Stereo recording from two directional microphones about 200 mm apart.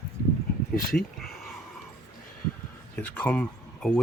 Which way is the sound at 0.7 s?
45° left (ahead or behind).